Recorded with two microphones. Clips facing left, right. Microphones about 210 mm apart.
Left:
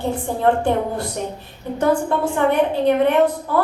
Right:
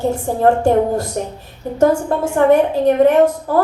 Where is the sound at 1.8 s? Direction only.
45° right (ahead or behind).